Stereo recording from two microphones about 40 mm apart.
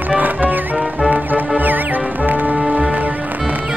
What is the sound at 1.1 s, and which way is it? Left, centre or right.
Music, right.